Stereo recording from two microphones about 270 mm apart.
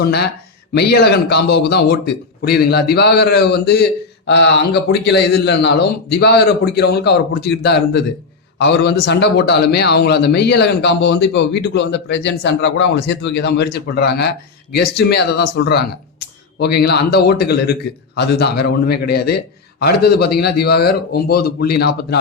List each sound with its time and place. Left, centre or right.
0.0 s a man's voice: left